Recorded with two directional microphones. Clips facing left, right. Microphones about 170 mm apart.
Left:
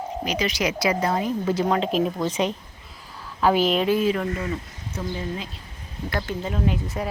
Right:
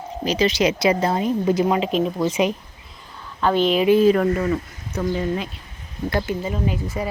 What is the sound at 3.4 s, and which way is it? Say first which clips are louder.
Speech: right 1 dB; 5° left (ahead or behind).